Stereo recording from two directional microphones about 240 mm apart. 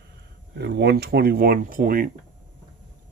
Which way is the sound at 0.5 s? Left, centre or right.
Right.